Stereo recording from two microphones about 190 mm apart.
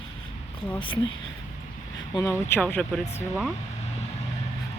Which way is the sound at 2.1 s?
15° left (ahead or behind).